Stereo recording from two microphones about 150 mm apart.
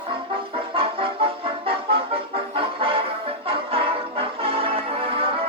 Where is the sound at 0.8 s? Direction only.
40° right (ahead or behind).